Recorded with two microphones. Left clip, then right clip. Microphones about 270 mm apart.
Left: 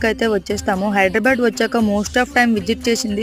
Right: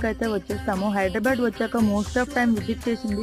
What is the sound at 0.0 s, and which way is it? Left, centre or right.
Speech, centre.